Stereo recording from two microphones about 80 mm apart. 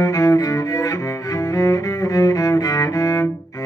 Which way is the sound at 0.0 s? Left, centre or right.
Left.